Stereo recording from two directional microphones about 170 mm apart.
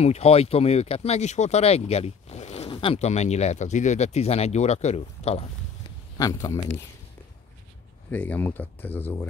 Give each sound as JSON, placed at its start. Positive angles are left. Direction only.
{"t": 0.0, "sound": "speech", "side_deg": 40}
{"t": 6.1, "sound": "speech", "side_deg": 20}
{"t": 8.1, "sound": "speech", "side_deg": 10}